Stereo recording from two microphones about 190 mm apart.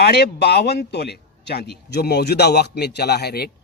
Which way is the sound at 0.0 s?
60° left (ahead or behind).